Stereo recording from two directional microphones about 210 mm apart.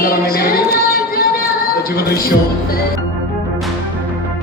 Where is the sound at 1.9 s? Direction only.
45° left (ahead or behind).